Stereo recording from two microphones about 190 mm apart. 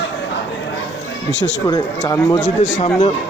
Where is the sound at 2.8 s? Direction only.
25° left (ahead or behind).